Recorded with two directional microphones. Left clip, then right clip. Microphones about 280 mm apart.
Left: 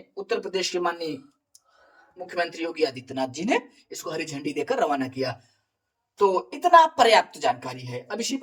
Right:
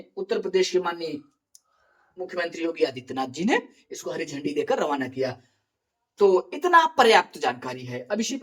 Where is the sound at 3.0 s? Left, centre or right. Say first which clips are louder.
Even; centre.